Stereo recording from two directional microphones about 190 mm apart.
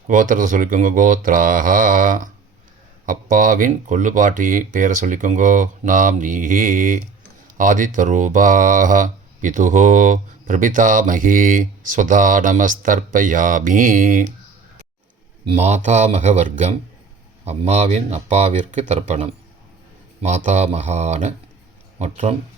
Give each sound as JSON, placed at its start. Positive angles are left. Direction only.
{"t": 0.1, "sound": "speech", "side_deg": -45}
{"t": 15.4, "sound": "speech", "side_deg": -35}